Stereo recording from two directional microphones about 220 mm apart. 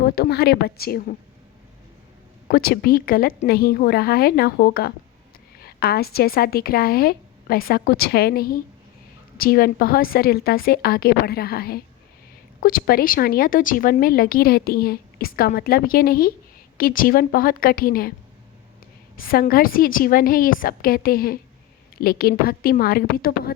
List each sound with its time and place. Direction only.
0.0 s a woman's voice: 45° left (ahead or behind)
2.5 s a woman's voice: 45° left (ahead or behind)
19.1 s a woman's voice: 40° left (ahead or behind)